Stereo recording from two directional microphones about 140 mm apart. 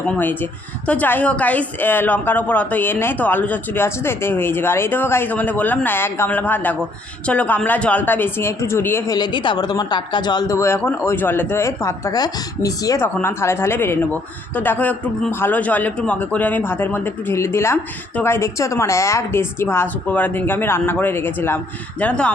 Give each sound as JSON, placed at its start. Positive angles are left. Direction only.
{"t": 0.2, "sound": "a woman's voice", "side_deg": 15}
{"t": 9.1, "sound": "a woman's voice", "side_deg": 30}